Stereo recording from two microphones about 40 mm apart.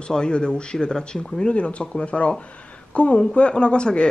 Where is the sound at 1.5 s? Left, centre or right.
Left.